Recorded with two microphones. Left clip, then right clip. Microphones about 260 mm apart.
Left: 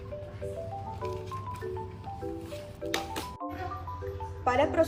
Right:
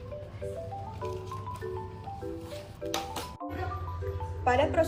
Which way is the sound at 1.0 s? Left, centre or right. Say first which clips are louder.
Even; centre.